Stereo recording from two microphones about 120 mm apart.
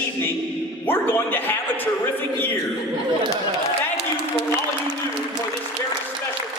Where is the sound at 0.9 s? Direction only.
15° left (ahead or behind).